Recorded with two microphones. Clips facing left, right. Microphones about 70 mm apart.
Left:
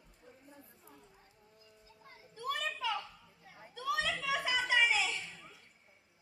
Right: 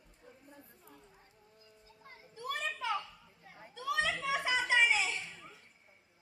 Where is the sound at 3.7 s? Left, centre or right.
Right.